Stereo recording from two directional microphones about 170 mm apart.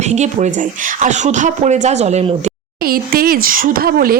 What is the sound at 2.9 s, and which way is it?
Speech, 60° right (ahead or behind).